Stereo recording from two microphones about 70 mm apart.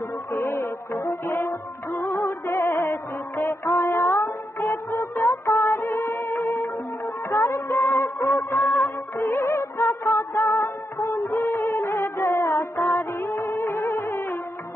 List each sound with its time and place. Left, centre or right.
0.3 s music: left
2.0 s music: left
2.8 s music: left
7.8 s music: left
11.1 s music: left
13.2 s music: left